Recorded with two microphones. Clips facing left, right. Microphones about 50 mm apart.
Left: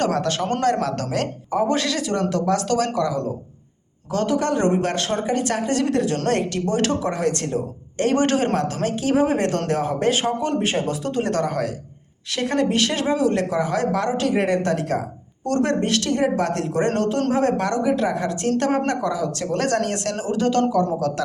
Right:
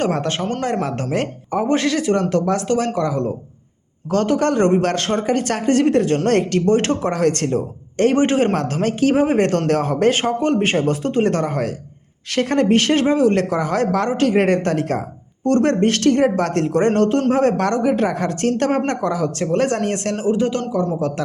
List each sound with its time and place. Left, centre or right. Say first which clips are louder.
0.0 s speech: right 1 dB; right
4.1 s speech: right 4 dB; right
7.1 s speech: right 5 dB; right
8.1 s speech: even; right
8.5 s speech: right 3 dB; right
19.5 s speech: right 3 dB; right
21.0 s speech: right 1 dB; right